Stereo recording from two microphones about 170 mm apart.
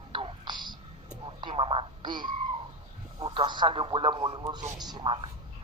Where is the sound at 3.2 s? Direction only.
30° right (ahead or behind).